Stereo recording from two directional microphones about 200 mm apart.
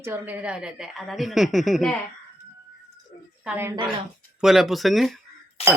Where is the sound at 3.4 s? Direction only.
10° right (ahead or behind).